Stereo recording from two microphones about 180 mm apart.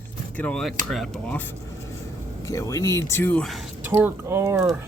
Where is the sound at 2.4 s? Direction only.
15° left (ahead or behind).